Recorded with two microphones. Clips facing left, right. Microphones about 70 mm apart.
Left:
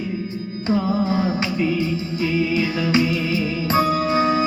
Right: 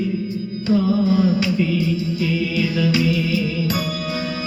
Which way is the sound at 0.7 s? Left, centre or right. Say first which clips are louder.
Right 3 dB; left.